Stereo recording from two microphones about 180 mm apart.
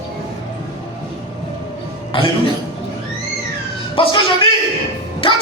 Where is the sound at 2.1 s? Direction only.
30° left (ahead or behind).